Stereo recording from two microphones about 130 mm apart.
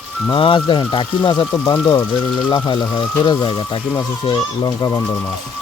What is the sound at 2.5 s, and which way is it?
Speech, 35° left (ahead or behind).